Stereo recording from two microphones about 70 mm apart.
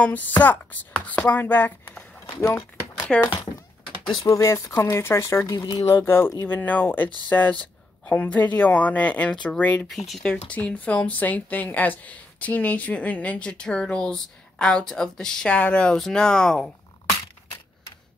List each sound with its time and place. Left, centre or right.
0.0 s a woman's voice: left
2.2 s speech: left
3.1 s speech: centre
4.2 s speech: left
5.5 s speech: left
5.9 s speech: left
6.4 s a woman's voice: left
9.8 s speech: centre
10.2 s a woman's voice: centre